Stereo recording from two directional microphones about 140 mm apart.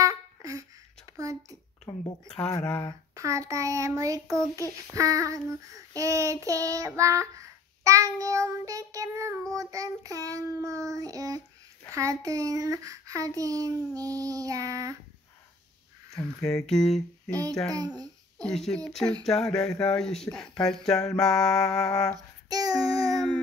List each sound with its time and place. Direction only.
0.0 s a sound: 25° right (ahead or behind)
1.1 s child singing: 25° right (ahead or behind)
2.6 s speech: 15° left (ahead or behind)
3.2 s child singing: 25° right (ahead or behind)
16.3 s speech: 5° left (ahead or behind)
17.3 s child singing: 25° right (ahead or behind)
18.4 s speech: 5° left (ahead or behind)
22.1 s child singing: 25° right (ahead or behind)